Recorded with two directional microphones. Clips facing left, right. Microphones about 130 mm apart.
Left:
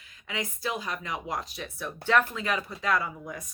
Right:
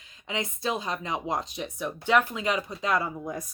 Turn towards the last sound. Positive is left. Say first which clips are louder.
# right 2 dB
turn(degrees=-30)  # may be behind; listen again after turning